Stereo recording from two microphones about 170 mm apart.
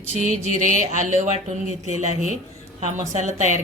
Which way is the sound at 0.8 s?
45° right (ahead or behind).